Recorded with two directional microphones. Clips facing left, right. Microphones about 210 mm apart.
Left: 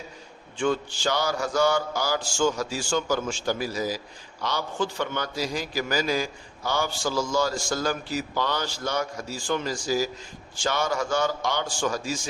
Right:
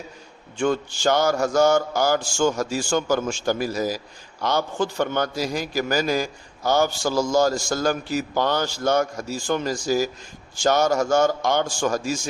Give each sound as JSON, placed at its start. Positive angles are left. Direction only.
{"t": 0.6, "sound": "mantra", "side_deg": -45}